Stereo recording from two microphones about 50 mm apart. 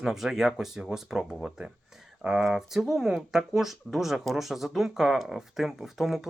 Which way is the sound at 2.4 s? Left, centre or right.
Centre.